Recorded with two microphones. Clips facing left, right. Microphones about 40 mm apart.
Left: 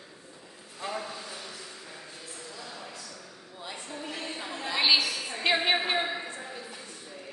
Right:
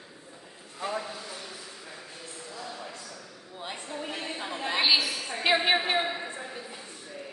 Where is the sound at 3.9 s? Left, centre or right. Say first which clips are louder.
Right 2 dB; centre.